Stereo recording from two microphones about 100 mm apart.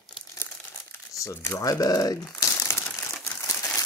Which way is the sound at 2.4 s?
25° left (ahead or behind).